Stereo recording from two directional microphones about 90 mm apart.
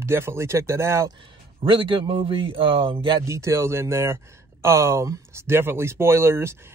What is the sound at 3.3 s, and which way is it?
Speech, 35° right (ahead or behind).